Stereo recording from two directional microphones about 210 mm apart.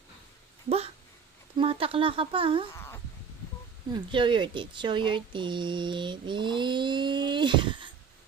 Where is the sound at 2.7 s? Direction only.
10° left (ahead or behind).